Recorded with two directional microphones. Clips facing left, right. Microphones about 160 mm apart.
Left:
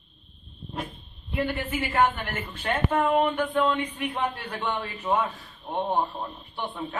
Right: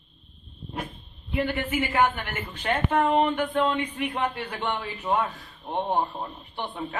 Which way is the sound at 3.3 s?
10° right (ahead or behind).